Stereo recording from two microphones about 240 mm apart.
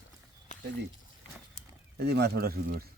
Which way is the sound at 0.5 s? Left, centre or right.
Left.